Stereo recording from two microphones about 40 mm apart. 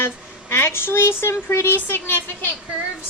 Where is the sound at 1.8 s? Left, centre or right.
Left.